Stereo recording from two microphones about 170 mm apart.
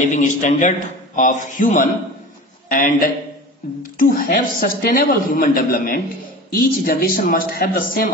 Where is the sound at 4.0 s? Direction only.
55° left (ahead or behind).